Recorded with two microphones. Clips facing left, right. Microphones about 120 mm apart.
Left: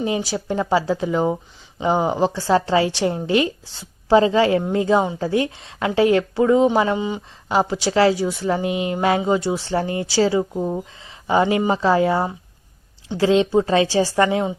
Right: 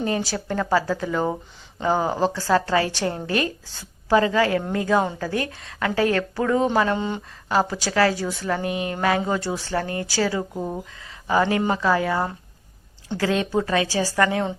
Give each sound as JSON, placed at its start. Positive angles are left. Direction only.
{"t": 0.0, "sound": "a woman's voice", "side_deg": 15}
{"t": 6.9, "sound": "speech", "side_deg": 5}
{"t": 7.4, "sound": "a woman's voice", "side_deg": 15}